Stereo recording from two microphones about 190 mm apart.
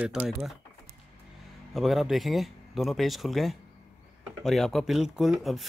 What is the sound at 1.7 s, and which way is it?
Speech, centre (ahead or behind).